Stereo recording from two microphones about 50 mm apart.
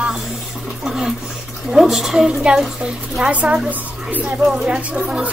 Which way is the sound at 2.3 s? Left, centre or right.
Centre.